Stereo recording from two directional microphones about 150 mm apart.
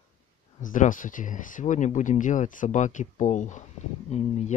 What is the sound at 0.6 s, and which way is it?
Speech, 60° left (ahead or behind).